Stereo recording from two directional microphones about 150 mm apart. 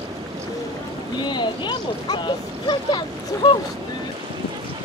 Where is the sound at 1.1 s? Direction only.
30° left (ahead or behind).